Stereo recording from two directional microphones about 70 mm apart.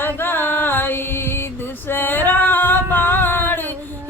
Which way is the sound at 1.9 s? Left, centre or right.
Left.